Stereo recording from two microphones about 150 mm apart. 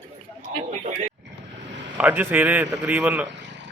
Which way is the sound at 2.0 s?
10° right (ahead or behind).